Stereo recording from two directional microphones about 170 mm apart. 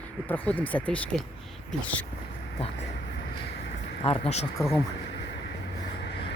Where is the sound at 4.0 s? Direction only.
35° left (ahead or behind).